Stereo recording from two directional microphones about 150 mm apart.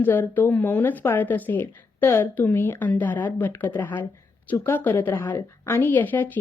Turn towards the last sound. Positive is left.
turn(degrees=10)  # may be behind; listen again after turning